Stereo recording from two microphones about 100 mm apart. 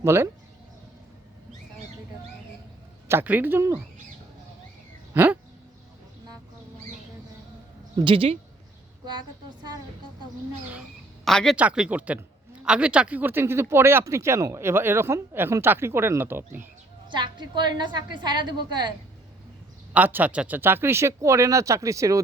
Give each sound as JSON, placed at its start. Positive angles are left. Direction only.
{"t": 0.0, "sound": "speech", "side_deg": -25}
{"t": 3.1, "sound": "speech", "side_deg": -20}
{"t": 5.1, "sound": "a sound", "side_deg": -15}
{"t": 7.9, "sound": "speech", "side_deg": -60}
{"t": 11.3, "sound": "speech", "side_deg": 5}
{"t": 11.5, "sound": "speech", "side_deg": -10}
{"t": 17.1, "sound": "a woman's voice", "side_deg": -50}
{"t": 19.9, "sound": "speech", "side_deg": -15}